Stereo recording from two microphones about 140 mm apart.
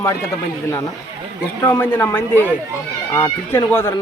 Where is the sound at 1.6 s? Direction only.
15° left (ahead or behind).